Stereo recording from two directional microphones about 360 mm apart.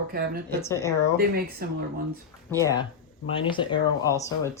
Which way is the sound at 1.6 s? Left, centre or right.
Right.